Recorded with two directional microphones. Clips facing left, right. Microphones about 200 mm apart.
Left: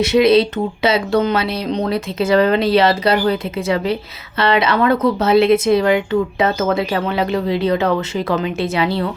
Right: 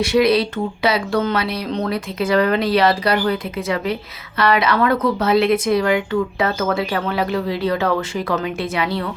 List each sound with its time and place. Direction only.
0.0 s a woman's voice: 25° left (ahead or behind)